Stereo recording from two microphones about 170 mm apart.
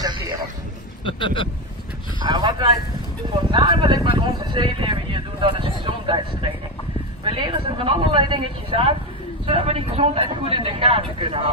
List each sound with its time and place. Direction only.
0.0 s a sound: 20° right (ahead or behind)
1.0 s speech: 30° left (ahead or behind)
2.2 s speech: 25° right (ahead or behind)